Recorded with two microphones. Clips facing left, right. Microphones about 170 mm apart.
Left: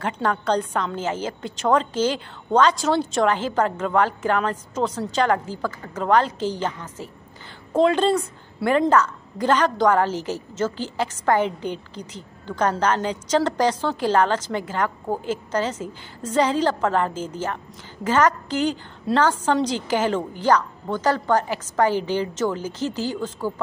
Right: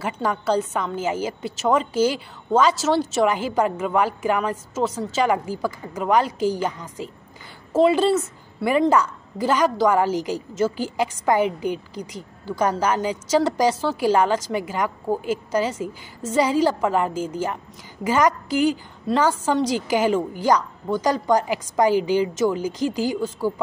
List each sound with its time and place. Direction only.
0.0 s a woman's voice: 5° right (ahead or behind)